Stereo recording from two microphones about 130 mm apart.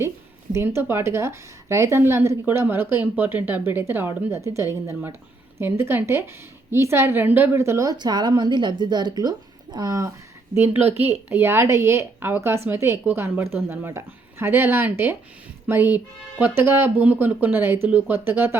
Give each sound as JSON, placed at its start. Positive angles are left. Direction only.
{"t": 0.5, "sound": "a woman's voice", "side_deg": -20}